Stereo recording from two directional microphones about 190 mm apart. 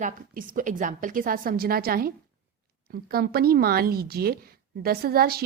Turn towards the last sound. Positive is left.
turn(degrees=-55)  # may be behind; listen again after turning